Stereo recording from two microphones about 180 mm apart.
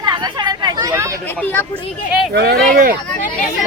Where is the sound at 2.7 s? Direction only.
50° right (ahead or behind).